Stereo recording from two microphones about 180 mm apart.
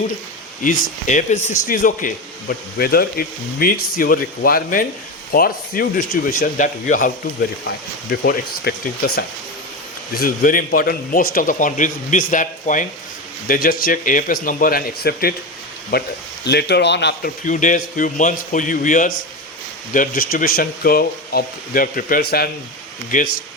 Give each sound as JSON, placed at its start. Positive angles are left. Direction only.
{"t": 0.6, "sound": "a man's voice", "side_deg": 50}
{"t": 8.1, "sound": "a man's voice", "side_deg": 60}
{"t": 17.4, "sound": "a man's voice", "side_deg": 45}
{"t": 23.1, "sound": "a man's voice", "side_deg": 45}